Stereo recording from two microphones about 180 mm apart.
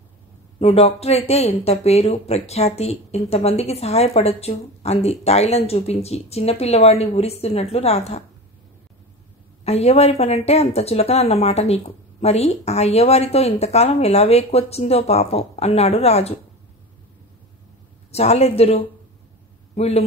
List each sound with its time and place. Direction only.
0.6 s speech: 35° left (ahead or behind)
9.7 s speech: 35° left (ahead or behind)
18.1 s a man's voice: 35° left (ahead or behind)